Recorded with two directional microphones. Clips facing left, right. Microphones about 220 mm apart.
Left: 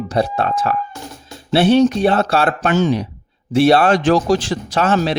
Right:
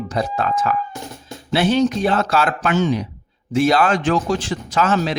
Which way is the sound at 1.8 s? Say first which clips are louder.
Left 4 dB; 30° left (ahead or behind).